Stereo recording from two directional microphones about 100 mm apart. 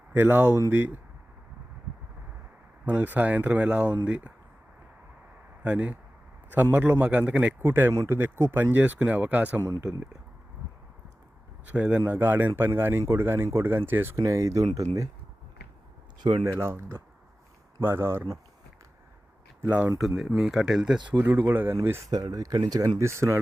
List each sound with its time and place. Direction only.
0.1 s a man's voice: 20° right (ahead or behind)
2.8 s speech: 15° right (ahead or behind)
5.6 s a man's voice: 10° right (ahead or behind)
9.6 s speech: 30° right (ahead or behind)
11.7 s a man's voice: 10° right (ahead or behind)
14.2 s speech: 30° right (ahead or behind)
16.4 s a man's voice: 25° right (ahead or behind)
19.6 s speech: 15° right (ahead or behind)
20.0 s speech: centre (ahead or behind)
21.2 s a man's voice: 20° right (ahead or behind)
22.1 s a man's voice: 40° right (ahead or behind)